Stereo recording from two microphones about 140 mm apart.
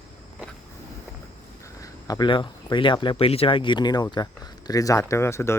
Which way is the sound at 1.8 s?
30° left (ahead or behind).